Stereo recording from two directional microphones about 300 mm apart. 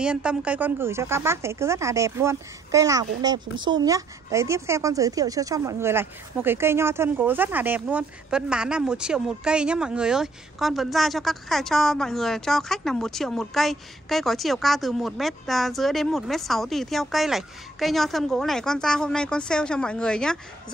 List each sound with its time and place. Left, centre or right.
0.0 s speech: centre